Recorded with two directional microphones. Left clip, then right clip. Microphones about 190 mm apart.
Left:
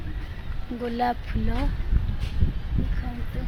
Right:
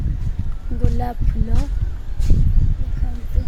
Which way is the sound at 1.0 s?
Centre (ahead or behind).